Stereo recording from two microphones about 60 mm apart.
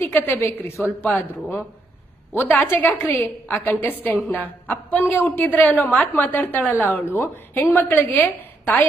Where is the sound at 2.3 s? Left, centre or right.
Left.